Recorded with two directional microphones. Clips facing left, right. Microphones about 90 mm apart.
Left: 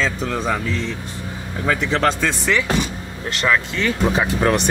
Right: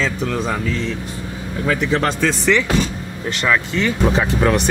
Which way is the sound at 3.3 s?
Centre (ahead or behind).